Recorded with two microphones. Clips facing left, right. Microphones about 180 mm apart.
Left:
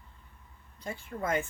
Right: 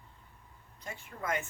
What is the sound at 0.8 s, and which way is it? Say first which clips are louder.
Speech: left 4 dB; 35° left (ahead or behind).